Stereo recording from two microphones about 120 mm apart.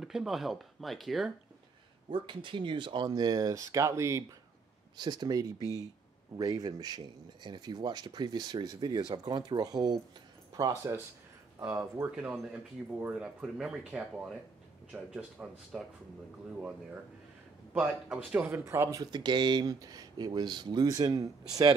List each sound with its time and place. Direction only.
0.0 s speech: 5° right (ahead or behind)
2.0 s speech: 45° right (ahead or behind)
3.1 s speech: 30° right (ahead or behind)
4.9 s speech: 35° right (ahead or behind)
5.6 s speech: 30° left (ahead or behind)
6.3 s speech: 30° right (ahead or behind)
13.0 s speech: 10° right (ahead or behind)
18.7 s speech: 25° right (ahead or behind)
19.1 s speech: 40° right (ahead or behind)